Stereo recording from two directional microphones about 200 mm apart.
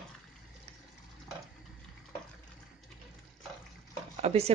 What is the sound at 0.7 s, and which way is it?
Water, 30° right (ahead or behind).